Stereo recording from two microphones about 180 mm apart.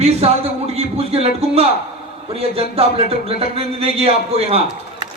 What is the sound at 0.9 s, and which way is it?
A man's voice, 35° right (ahead or behind).